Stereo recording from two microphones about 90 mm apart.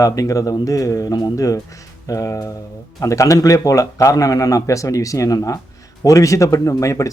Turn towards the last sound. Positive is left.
turn(degrees=35)  # may be behind; listen again after turning